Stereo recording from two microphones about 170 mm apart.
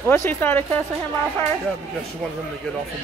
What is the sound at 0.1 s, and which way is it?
Speech, 15° left (ahead or behind).